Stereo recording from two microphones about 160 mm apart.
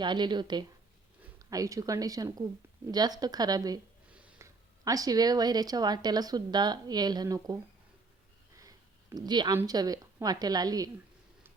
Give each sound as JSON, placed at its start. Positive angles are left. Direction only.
{"t": 0.0, "sound": "speech", "side_deg": -30}
{"t": 8.6, "sound": "a sound", "side_deg": -25}
{"t": 9.6, "sound": "speech", "side_deg": -25}